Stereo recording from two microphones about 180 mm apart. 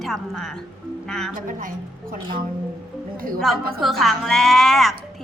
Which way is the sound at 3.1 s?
55° right (ahead or behind).